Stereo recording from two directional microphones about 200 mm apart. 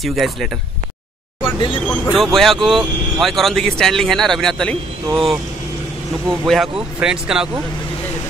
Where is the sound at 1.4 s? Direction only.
25° left (ahead or behind).